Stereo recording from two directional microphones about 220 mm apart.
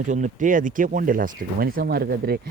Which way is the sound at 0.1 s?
35° right (ahead or behind).